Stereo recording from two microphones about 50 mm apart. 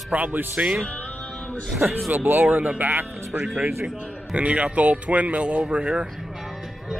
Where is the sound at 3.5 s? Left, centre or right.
Right.